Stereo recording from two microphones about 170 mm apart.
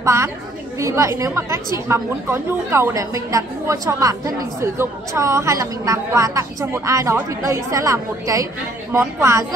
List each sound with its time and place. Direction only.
0.0 s a woman's voice: 15° right (ahead or behind)